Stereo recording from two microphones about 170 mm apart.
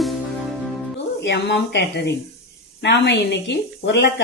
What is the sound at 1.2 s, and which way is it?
Speech, 85° left.